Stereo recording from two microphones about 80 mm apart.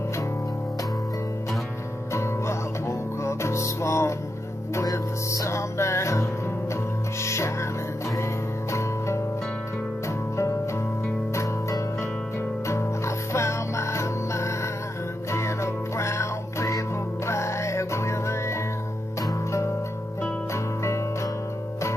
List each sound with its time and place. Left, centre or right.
2.1 s music: left
7.2 s music: left
8.7 s music: left
12.6 s music: left